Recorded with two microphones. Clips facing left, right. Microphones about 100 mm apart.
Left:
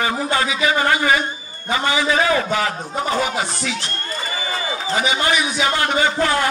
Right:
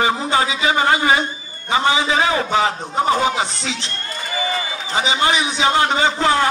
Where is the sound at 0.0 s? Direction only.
25° right (ahead or behind).